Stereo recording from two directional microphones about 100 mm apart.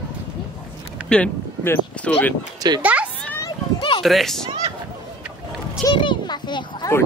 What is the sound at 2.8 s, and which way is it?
Speech, 15° right (ahead or behind).